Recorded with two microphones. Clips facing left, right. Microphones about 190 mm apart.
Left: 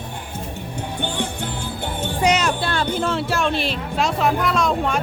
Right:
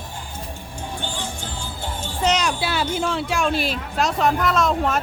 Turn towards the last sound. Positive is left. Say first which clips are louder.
# even
turn(degrees=0)  # may be behind; listen again after turning